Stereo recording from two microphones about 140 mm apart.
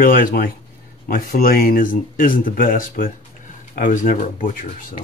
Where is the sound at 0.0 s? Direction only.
85° left.